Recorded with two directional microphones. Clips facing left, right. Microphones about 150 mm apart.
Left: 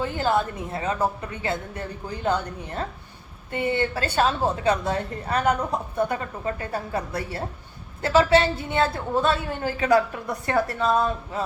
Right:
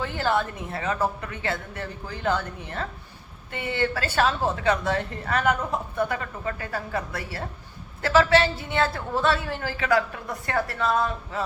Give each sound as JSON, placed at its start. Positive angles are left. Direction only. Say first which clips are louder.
{"t": 0.2, "sound": "a woman's voice", "louder": "left 1 dB", "side_deg": 20}
{"t": 5.4, "sound": "a woman's voice", "louder": "left 1 dB", "side_deg": 20}